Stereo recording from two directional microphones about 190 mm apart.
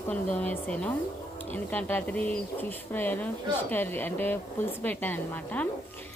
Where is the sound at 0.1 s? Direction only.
10° left (ahead or behind).